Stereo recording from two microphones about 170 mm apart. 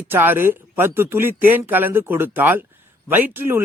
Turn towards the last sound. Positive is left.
turn(degrees=-15)  # may be behind; listen again after turning